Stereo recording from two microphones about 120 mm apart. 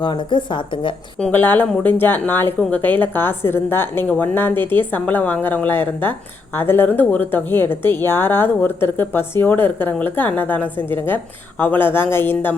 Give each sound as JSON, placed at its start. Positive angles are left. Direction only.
{"t": 0.0, "sound": "speech", "side_deg": 40}
{"t": 1.2, "sound": "speech", "side_deg": 15}